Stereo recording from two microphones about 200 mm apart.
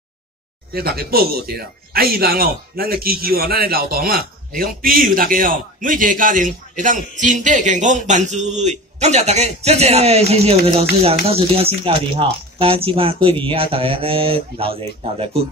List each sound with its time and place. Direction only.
0.7 s speech: 50° right (ahead or behind); by 15.4 s 30° right (ahead or behind)